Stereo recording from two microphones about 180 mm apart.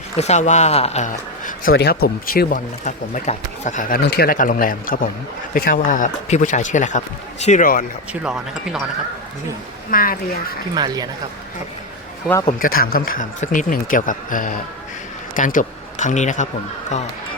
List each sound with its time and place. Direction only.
0.2 s speech: 40° left (ahead or behind)
1.7 s speech: 65° left (ahead or behind); by 4.0 s 50° left (ahead or behind)
4.0 s speech: 60° left (ahead or behind)
8.2 s speech: 5° right (ahead or behind)
9.9 s speech: 50° left (ahead or behind)
10.8 s speech: 20° right (ahead or behind)
12.5 s speech: 50° left (ahead or behind)